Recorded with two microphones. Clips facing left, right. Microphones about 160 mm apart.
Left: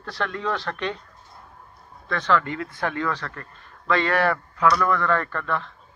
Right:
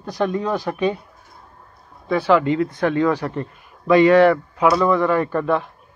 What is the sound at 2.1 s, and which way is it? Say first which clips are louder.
Speech: right 7 dB; 10° right (ahead or behind).